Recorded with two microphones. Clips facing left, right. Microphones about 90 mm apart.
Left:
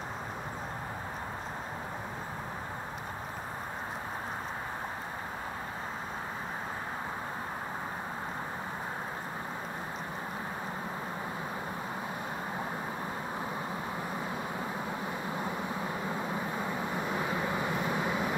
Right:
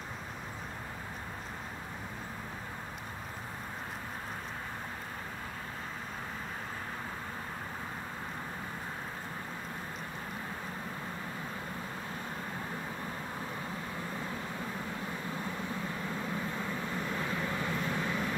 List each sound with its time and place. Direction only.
16.1 s vehicle: 20° left (ahead or behind)